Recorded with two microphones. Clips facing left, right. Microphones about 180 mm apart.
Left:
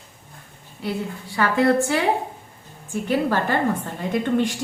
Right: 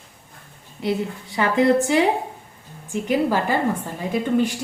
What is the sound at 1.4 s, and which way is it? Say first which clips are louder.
A woman's voice: right 1 dB; 20° right (ahead or behind).